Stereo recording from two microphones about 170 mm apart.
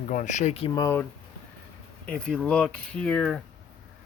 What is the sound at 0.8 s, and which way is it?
Speech, 15° left (ahead or behind).